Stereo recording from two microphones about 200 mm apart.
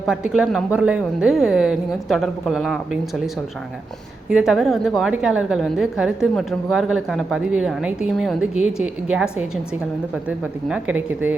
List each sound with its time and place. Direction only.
0.1 s a woman's voice: 5° right (ahead or behind)
4.3 s a woman's voice: 5° right (ahead or behind)